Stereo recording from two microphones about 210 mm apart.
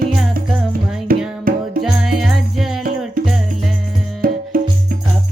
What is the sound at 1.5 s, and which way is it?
Music, 45° right (ahead or behind).